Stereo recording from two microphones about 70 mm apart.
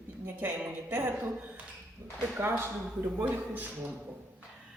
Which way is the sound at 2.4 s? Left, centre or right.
Right.